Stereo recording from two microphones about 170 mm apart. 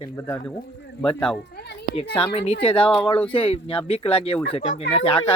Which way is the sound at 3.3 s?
30° left (ahead or behind).